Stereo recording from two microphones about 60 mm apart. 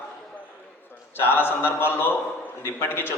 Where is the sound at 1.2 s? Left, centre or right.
Left.